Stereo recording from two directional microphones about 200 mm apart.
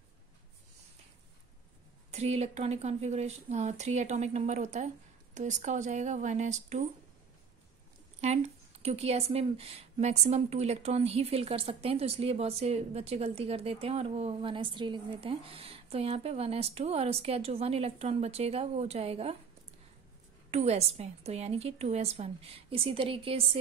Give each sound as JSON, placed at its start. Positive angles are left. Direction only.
{"t": 2.0, "sound": "speech", "side_deg": -35}
{"t": 8.2, "sound": "speech", "side_deg": -35}
{"t": 20.5, "sound": "speech", "side_deg": -30}